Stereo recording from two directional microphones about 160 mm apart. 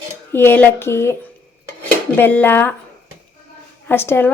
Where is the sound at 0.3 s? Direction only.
15° left (ahead or behind).